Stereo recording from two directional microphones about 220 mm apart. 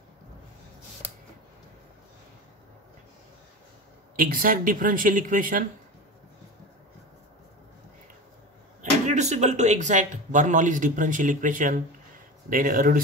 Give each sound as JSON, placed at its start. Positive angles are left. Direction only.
{"t": 4.2, "sound": "speech", "side_deg": -40}
{"t": 9.0, "sound": "speech", "side_deg": -30}